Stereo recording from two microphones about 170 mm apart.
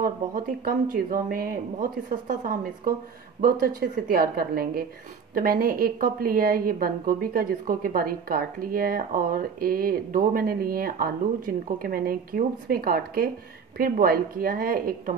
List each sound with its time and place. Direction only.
0.0 s a woman's voice: 60° right (ahead or behind)